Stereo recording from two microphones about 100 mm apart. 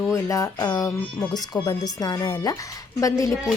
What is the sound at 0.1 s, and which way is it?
Speech, 30° left (ahead or behind).